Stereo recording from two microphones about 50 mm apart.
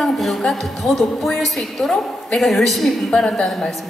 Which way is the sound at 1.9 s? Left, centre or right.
Centre.